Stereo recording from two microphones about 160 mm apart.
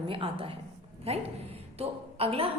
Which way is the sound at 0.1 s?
35° right (ahead or behind).